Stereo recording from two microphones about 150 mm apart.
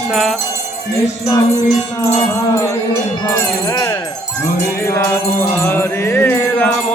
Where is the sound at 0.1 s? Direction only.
Centre (ahead or behind).